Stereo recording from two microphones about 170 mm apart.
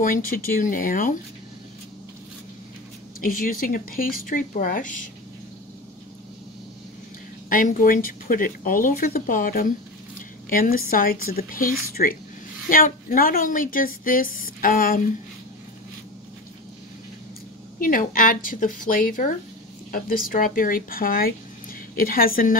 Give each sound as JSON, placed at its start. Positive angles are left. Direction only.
{"t": 0.0, "sound": "a woman's voice", "side_deg": 55}
{"t": 3.2, "sound": "speech", "side_deg": 55}
{"t": 7.4, "sound": "speech", "side_deg": 55}
{"t": 17.8, "sound": "a woman's voice", "side_deg": 55}